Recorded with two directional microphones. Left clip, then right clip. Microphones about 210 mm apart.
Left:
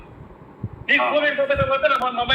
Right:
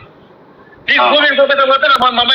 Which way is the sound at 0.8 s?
40° right (ahead or behind).